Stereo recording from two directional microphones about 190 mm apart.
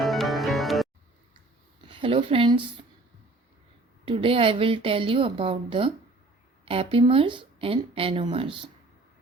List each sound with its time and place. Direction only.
0.0 s music: centre (ahead or behind)
1.9 s speech: 30° right (ahead or behind)
4.0 s a woman's voice: 25° right (ahead or behind)
6.9 s a woman's voice: 30° right (ahead or behind)